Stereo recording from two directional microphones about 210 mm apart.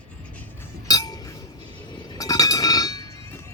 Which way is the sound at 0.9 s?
20° left (ahead or behind).